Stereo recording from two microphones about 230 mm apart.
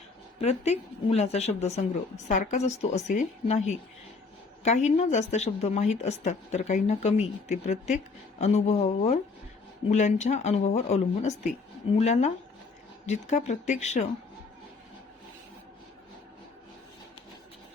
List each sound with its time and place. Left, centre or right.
0.3 s a woman's voice: left